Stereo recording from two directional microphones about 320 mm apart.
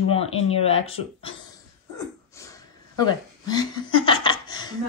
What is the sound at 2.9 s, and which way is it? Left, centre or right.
Speech, centre.